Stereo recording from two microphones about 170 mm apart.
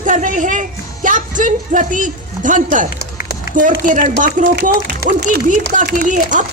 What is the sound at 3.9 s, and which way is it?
A woman's voice, 50° right (ahead or behind).